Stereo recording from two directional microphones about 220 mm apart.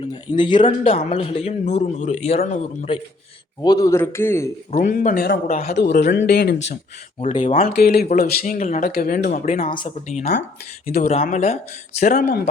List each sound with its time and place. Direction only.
0.1 s a man's voice: 20° left (ahead or behind)
3.6 s a man's voice: 15° left (ahead or behind)
4.7 s speech: 40° left (ahead or behind)
5.7 s speech: 45° left (ahead or behind)
7.2 s speech: 30° left (ahead or behind)
7.7 s speech: 45° left (ahead or behind)